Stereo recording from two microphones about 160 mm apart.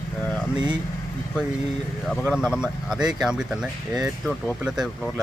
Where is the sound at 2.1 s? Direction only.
Centre (ahead or behind).